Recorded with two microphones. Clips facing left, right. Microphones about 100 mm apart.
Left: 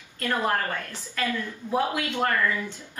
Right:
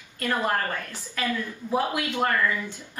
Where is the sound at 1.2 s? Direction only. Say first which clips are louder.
Even; 5° right (ahead or behind).